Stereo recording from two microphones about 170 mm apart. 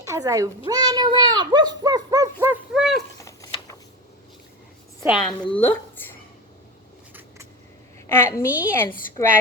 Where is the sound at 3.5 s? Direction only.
25° left (ahead or behind).